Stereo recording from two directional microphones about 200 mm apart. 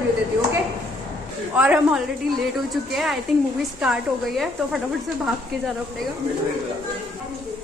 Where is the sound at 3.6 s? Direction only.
Centre (ahead or behind).